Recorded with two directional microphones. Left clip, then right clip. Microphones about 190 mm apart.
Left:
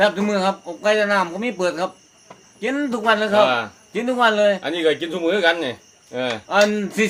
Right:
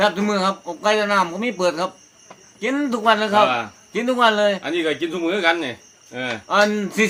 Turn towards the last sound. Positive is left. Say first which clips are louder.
# even
turn(degrees=-10)  # may be behind; listen again after turning